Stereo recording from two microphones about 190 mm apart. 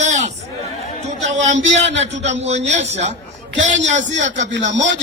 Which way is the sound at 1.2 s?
40° right (ahead or behind).